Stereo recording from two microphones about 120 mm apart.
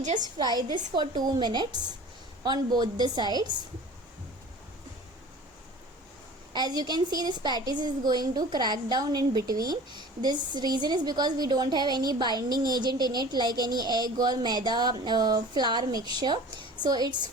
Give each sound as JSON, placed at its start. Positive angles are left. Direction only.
{"t": 0.0, "sound": "a woman's voice", "side_deg": -90}
{"t": 0.3, "sound": "a woman's voice", "side_deg": -35}
{"t": 6.5, "sound": "a woman's voice", "side_deg": -35}